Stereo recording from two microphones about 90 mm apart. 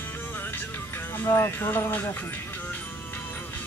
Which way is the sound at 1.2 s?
30° left (ahead or behind).